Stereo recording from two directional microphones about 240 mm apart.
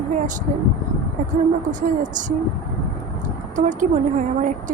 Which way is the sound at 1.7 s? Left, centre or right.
Right.